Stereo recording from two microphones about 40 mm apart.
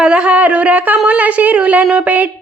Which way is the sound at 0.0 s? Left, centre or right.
Right.